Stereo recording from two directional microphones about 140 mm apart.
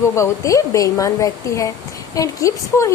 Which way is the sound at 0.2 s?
20° left (ahead or behind).